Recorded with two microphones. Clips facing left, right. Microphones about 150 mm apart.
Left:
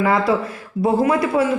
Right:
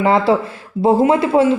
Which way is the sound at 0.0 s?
25° right (ahead or behind).